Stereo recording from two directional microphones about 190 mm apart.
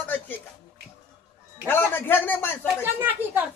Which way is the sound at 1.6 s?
10° left (ahead or behind).